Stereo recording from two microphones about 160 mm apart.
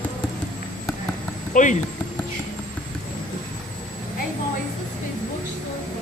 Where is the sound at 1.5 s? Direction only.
50° left (ahead or behind).